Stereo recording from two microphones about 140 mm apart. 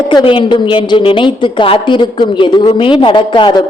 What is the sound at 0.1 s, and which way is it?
A man's voice, 35° left (ahead or behind).